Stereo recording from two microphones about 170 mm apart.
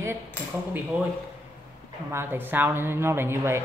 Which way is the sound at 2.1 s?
15° right (ahead or behind).